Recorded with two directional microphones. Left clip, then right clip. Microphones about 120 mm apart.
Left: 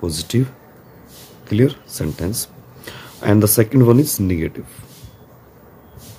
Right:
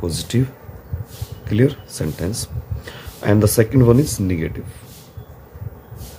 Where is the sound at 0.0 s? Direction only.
20° left (ahead or behind).